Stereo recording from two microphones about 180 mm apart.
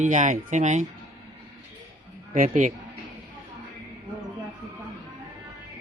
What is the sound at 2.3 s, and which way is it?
Speech, 45° right (ahead or behind).